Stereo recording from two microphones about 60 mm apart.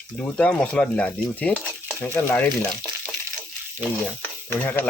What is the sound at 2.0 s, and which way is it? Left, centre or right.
Speech, left.